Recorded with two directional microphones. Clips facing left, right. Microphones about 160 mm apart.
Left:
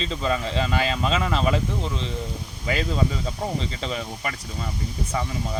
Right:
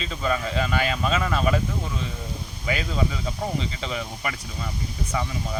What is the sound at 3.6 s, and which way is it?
Speech, 35° left (ahead or behind).